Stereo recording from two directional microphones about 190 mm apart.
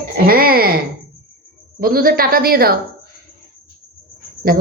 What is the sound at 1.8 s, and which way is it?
Speech, 50° right (ahead or behind).